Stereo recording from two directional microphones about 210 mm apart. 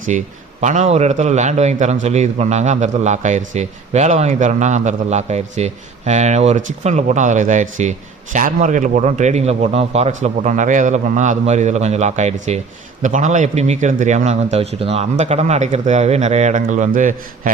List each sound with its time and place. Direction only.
0.1 s a man's voice: 35° right (ahead or behind)